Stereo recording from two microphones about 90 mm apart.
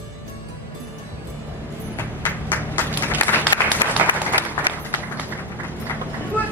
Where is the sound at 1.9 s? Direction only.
20° left (ahead or behind).